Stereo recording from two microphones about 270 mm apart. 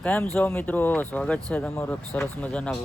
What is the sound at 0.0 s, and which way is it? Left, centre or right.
Speech, centre.